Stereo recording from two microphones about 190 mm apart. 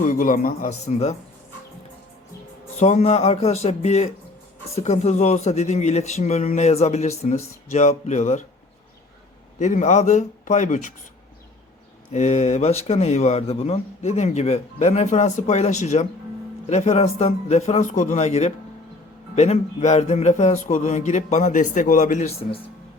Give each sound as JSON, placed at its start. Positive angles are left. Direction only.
{"t": 0.0, "sound": "a man's voice", "side_deg": 45}
{"t": 2.7, "sound": "a man's voice", "side_deg": 35}
{"t": 9.6, "sound": "a man's voice", "side_deg": 40}
{"t": 12.1, "sound": "a man's voice", "side_deg": 35}